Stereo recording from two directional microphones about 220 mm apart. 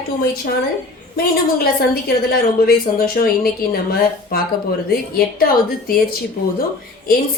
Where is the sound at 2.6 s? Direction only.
40° left (ahead or behind).